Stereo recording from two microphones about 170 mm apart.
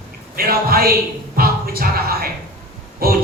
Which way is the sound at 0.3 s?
60° right (ahead or behind).